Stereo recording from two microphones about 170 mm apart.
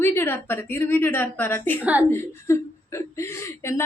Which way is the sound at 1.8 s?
10° right (ahead or behind).